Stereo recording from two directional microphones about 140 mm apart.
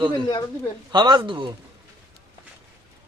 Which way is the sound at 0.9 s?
30° right (ahead or behind).